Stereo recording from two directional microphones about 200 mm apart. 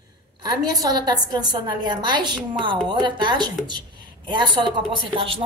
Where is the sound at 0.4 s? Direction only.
20° right (ahead or behind).